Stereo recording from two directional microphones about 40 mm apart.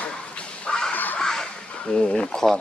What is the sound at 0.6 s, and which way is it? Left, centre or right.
Crow, centre.